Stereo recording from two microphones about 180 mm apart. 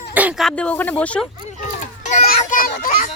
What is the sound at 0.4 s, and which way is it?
Speech, 5° left (ahead or behind).